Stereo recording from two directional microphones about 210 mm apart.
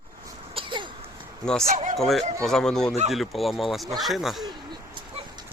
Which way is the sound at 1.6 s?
40° right (ahead or behind).